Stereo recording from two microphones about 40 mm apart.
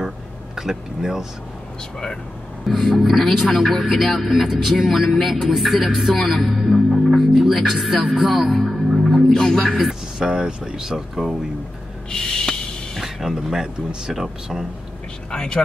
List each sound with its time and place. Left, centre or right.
0.6 s speech: centre
2.7 s speech: centre
3.1 s a man's voice: centre
8.3 s music: centre
9.3 s speech: centre
10.1 s speech: centre
12.1 s snort: centre
13.0 s a man's voice: centre
15.3 s speech: left